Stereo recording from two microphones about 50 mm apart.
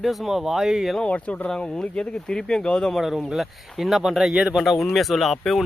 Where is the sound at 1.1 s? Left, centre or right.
Left.